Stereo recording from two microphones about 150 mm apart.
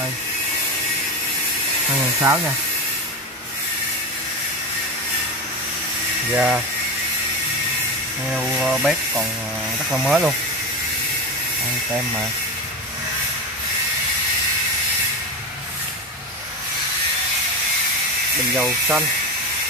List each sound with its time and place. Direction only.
6.3 s speech: 10° right (ahead or behind)
8.4 s speech: 5° right (ahead or behind)
18.6 s speech: 10° right (ahead or behind)